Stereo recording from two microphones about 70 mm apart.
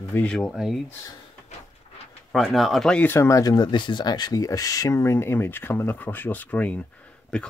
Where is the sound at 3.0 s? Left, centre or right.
Left.